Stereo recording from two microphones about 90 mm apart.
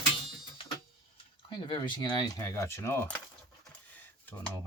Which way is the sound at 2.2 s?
40° left (ahead or behind).